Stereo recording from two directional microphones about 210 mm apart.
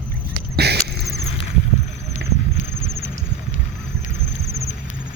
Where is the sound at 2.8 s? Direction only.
15° right (ahead or behind).